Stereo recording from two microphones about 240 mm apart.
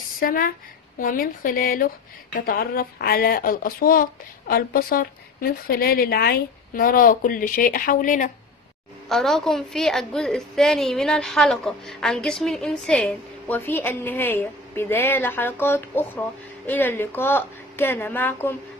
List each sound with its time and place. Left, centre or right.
0.2 s speech: left
9.1 s a woman's voice: centre